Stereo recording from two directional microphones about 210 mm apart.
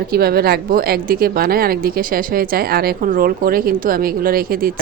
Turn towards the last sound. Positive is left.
turn(degrees=-45)  # may be behind; listen again after turning